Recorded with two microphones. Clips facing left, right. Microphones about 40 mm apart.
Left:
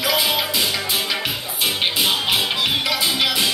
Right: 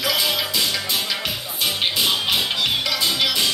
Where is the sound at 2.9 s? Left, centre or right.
Centre.